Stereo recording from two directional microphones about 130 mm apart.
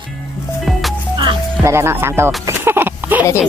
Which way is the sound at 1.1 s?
40° right (ahead or behind).